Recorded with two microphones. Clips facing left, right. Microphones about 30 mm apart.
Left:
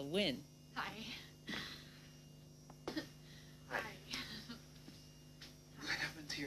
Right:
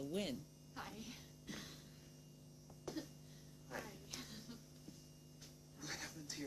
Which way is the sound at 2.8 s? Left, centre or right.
Left.